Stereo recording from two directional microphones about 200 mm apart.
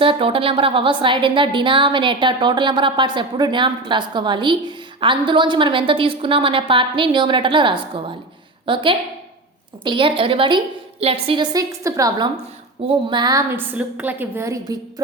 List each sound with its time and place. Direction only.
0.0 s a woman's voice: 25° right (ahead or behind)